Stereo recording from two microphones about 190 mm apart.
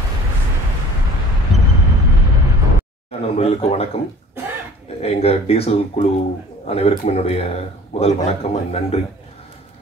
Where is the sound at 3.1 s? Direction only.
30° left (ahead or behind).